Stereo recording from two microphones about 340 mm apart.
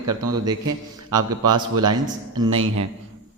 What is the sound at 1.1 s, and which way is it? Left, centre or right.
Speech, right.